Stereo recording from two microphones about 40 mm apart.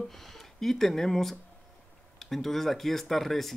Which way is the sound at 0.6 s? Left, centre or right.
Centre.